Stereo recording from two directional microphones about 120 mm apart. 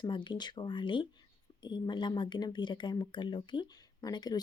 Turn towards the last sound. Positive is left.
turn(degrees=35)  # may be behind; listen again after turning